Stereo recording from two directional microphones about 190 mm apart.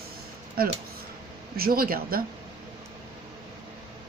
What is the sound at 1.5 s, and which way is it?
Speech, 50° right (ahead or behind).